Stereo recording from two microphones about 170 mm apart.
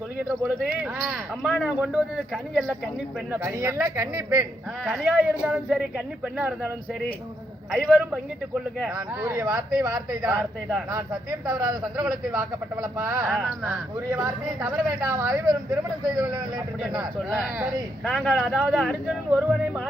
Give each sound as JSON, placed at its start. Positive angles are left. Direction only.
{"t": 0.3, "sound": "a man's voice", "side_deg": -5}
{"t": 3.3, "sound": "speech", "side_deg": -10}
{"t": 4.8, "sound": "a man's voice", "side_deg": 0}
{"t": 7.7, "sound": "a man's voice", "side_deg": 0}
{"t": 8.9, "sound": "speech", "side_deg": -15}
{"t": 17.2, "sound": "a man's voice", "side_deg": -5}